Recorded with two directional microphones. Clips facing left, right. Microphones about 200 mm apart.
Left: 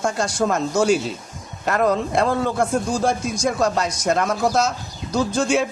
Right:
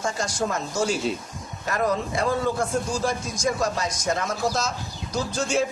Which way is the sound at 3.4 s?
65° left (ahead or behind).